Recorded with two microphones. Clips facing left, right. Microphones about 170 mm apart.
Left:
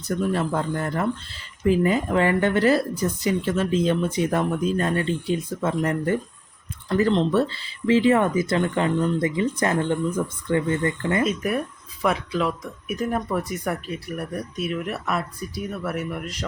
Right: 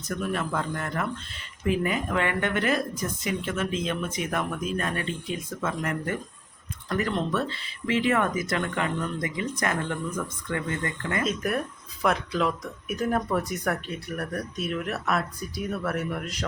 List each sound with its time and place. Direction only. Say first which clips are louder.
0.2 s speech: left 4 dB; 30° left (ahead or behind)
11.2 s speech: left 1 dB; 5° left (ahead or behind)